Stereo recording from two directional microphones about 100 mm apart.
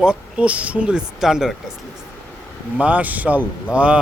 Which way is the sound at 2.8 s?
15° right (ahead or behind).